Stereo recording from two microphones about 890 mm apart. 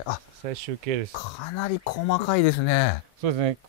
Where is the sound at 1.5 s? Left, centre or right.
Left.